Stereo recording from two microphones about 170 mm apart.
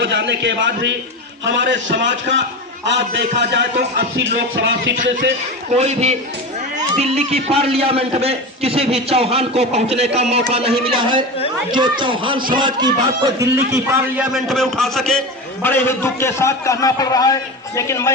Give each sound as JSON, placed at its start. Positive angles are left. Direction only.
{"t": 0.0, "sound": "music", "side_deg": -90}
{"t": 3.9, "sound": "music", "side_deg": -80}
{"t": 5.7, "sound": "a man's voice", "side_deg": -40}
{"t": 13.4, "sound": "a man's voice", "side_deg": -15}
{"t": 14.2, "sound": "a man's voice", "side_deg": 0}